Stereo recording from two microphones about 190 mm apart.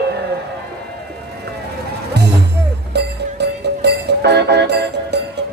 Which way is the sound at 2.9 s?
60° right (ahead or behind).